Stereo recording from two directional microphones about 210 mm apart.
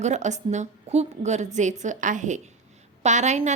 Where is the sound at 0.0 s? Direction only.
35° right (ahead or behind).